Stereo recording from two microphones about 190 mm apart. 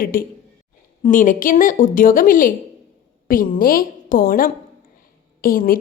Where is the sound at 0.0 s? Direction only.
50° left (ahead or behind).